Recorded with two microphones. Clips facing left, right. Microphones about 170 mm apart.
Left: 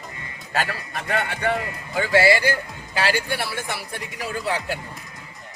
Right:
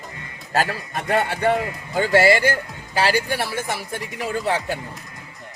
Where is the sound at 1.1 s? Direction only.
40° right (ahead or behind).